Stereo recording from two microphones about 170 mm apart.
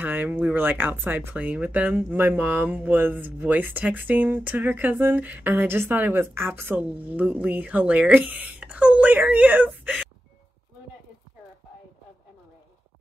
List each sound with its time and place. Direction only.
0.0 s speech: 10° right (ahead or behind)